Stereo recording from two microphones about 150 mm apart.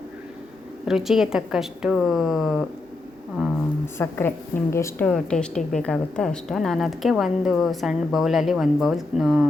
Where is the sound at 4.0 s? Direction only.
15° left (ahead or behind).